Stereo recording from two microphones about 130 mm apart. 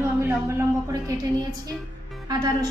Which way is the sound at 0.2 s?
20° right (ahead or behind).